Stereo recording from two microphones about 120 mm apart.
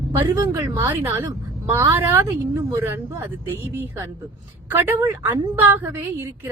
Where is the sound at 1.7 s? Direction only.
20° right (ahead or behind).